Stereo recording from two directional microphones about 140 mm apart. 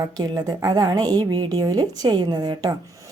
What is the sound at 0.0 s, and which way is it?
Speech, 25° right (ahead or behind).